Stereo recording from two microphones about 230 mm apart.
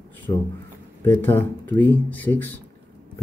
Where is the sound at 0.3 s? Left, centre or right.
Centre.